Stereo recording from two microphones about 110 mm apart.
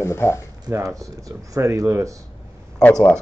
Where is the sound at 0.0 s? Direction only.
25° left (ahead or behind).